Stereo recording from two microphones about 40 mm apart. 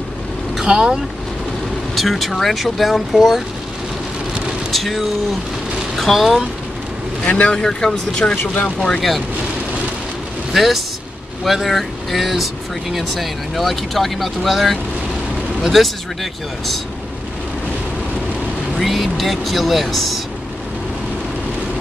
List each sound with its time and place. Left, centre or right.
0.6 s speech: centre
2.0 s speech: centre
4.6 s vehicle: centre
5.9 s speech: centre
7.2 s speech: left
7.6 s speech: centre
10.5 s speech: centre
18.8 s speech: centre